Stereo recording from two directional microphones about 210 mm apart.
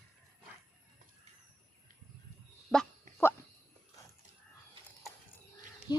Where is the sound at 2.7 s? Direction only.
5° left (ahead or behind).